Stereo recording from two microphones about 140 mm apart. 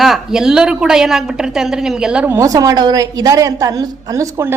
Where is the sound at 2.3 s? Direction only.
25° right (ahead or behind).